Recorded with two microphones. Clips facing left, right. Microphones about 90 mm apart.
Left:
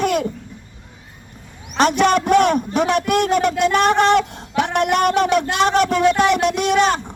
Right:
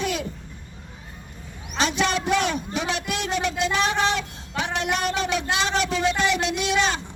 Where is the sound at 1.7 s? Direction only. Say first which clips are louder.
Left 8 dB; 55° left (ahead or behind).